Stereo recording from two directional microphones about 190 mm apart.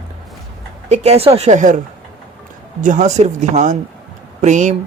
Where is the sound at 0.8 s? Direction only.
35° right (ahead or behind).